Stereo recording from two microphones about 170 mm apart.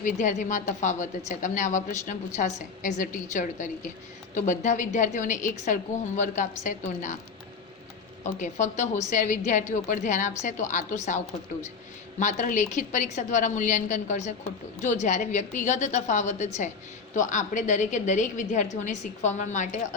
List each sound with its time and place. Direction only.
0.0 s a woman's voice: 45° left (ahead or behind)
8.4 s a woman's voice: 45° left (ahead or behind)
12.2 s a woman's voice: 45° left (ahead or behind)